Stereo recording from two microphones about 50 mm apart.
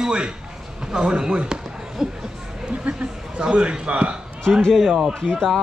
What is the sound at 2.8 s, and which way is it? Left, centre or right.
A man's voice, right.